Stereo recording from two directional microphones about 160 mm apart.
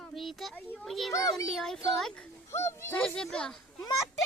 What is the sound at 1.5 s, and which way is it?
Speech, centre (ahead or behind).